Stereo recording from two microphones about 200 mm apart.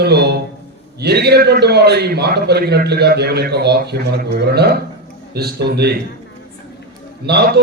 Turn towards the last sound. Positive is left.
turn(degrees=-55)  # may be behind; listen again after turning